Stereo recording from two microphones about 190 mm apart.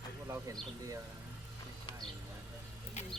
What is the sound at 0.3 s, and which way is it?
Speech, 15° right (ahead or behind).